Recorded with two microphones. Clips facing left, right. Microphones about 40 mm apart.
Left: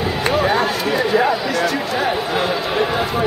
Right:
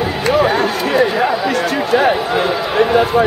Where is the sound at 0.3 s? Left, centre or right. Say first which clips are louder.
Right 4 dB; centre.